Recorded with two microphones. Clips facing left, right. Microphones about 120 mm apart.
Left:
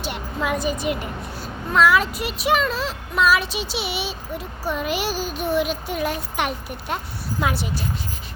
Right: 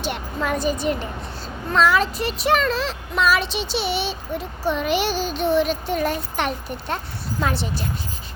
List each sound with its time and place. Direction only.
0.0 s speech: 5° left (ahead or behind)